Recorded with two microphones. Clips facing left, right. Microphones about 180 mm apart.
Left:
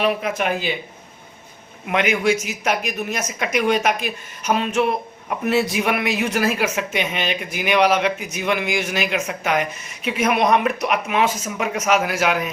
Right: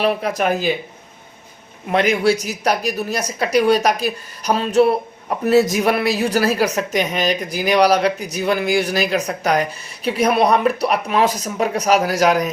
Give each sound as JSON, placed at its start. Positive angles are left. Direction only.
{"t": 0.0, "sound": "speech", "side_deg": -35}
{"t": 1.9, "sound": "speech", "side_deg": -35}